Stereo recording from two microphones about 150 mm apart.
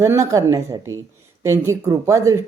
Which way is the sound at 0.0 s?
20° right (ahead or behind).